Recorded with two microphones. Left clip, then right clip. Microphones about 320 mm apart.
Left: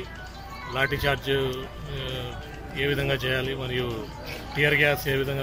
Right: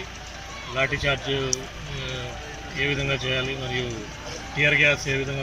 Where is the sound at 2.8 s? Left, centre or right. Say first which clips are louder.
Right 1 dB; centre.